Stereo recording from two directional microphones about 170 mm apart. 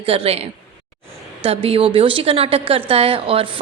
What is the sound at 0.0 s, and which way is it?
A woman's voice, 35° right (ahead or behind).